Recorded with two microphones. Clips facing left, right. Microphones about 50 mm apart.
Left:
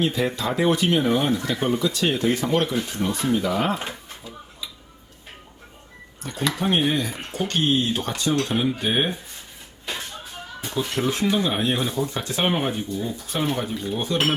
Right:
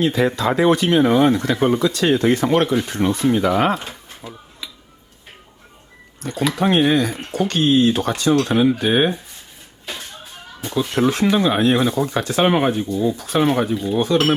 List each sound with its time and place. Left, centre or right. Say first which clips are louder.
0.0 s speech: right 5 dB; right
1.3 s speech: right 6 dB; right
3.1 s speech: right 7 dB; right
3.3 s speech: right 5 dB; right
6.2 s speech: right 7 dB; right
6.6 s speech: right 7 dB; right
11.1 s speech: right 5 dB; right
13.9 s speech: right 8 dB; right